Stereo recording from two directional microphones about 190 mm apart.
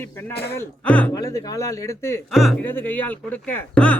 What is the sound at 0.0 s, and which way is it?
Speech, 10° left (ahead or behind).